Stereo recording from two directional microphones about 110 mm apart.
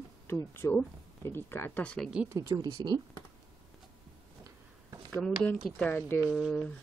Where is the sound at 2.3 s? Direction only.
30° right (ahead or behind).